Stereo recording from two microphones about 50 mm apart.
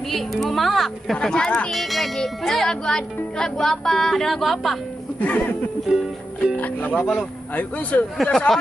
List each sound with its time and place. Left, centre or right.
0.1 s speech: centre
1.2 s speech: centre
1.7 s speech: centre
2.7 s speech: centre
5.2 s speech: left
5.9 s music: centre
6.5 s speech: left
8.2 s speech: centre